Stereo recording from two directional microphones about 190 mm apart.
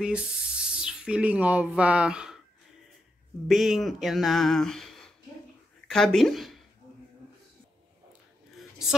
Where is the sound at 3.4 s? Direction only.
Centre (ahead or behind).